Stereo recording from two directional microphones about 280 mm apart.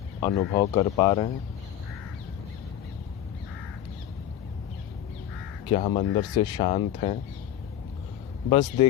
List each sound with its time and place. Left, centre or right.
0.2 s speech: centre
5.7 s speech: centre
8.4 s speech: centre